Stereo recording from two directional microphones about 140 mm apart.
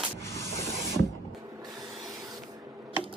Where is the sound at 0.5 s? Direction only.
20° left (ahead or behind).